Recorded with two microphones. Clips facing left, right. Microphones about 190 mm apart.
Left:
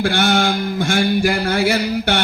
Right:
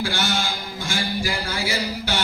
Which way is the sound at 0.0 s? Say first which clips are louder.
Left 9 dB; 60° left (ahead or behind).